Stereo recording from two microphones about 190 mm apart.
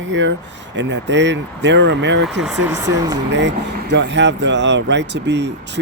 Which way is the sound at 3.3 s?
65° right (ahead or behind).